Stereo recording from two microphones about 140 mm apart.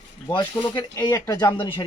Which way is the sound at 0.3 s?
30° left (ahead or behind).